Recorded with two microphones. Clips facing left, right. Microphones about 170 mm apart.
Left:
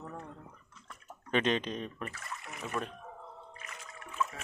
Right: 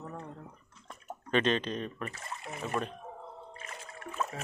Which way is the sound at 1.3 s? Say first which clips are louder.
Right 2 dB; 15° left (ahead or behind).